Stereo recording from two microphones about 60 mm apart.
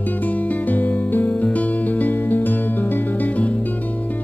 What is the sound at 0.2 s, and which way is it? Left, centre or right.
Music, left.